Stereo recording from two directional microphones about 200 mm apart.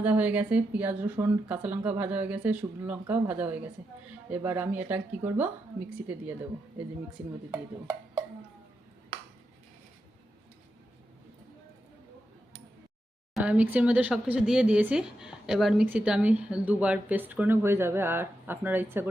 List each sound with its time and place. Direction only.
0.0 s speech: 5° right (ahead or behind)
13.3 s speech: 5° right (ahead or behind)